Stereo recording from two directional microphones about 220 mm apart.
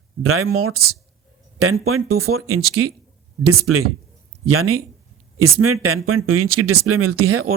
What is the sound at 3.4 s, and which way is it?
Speech, 90° right.